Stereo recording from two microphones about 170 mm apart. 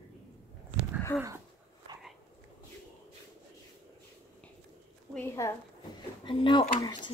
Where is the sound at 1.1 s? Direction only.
5° left (ahead or behind).